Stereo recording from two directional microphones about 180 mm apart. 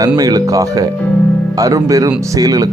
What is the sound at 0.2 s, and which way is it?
Speech, 20° right (ahead or behind).